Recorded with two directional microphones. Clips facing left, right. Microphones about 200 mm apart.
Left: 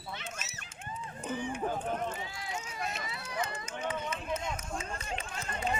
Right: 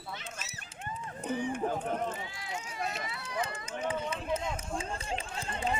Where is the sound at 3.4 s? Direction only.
30° right (ahead or behind).